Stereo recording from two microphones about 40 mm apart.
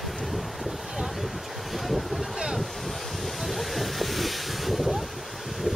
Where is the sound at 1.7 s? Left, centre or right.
Centre.